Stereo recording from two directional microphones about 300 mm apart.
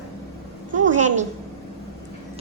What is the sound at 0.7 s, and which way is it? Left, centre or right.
Speech, right.